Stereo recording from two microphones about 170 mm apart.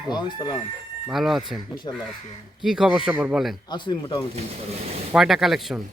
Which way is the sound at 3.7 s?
25° left (ahead or behind).